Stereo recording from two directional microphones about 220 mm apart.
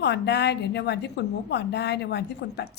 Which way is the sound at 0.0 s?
50° left (ahead or behind).